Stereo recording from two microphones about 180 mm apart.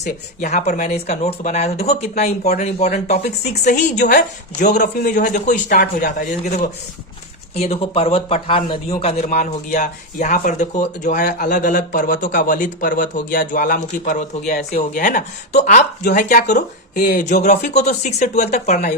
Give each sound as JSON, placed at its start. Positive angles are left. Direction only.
{"t": 0.0, "sound": "speech", "side_deg": 40}
{"t": 5.6, "sound": "speech", "side_deg": 55}
{"t": 7.5, "sound": "speech", "side_deg": 35}
{"t": 11.5, "sound": "speech", "side_deg": 50}